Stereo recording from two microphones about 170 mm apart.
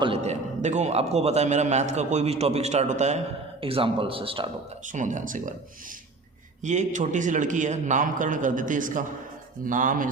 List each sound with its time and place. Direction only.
0.0 s a man's voice: 35° right (ahead or behind)
3.6 s a man's voice: 30° right (ahead or behind)
4.9 s a man's voice: 50° right (ahead or behind)
6.6 s a man's voice: 45° right (ahead or behind)